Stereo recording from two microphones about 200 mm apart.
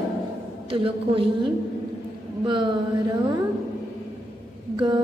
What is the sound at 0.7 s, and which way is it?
A woman's voice, 25° right (ahead or behind).